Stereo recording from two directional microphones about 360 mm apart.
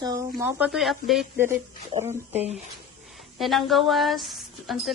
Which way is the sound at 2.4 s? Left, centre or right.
Centre.